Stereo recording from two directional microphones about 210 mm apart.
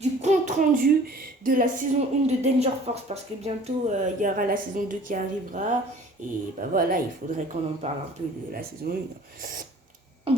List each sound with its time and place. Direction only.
0.0 s speech: 35° right (ahead or behind)
8.9 s speech: 45° right (ahead or behind)
10.3 s a sound: 25° right (ahead or behind)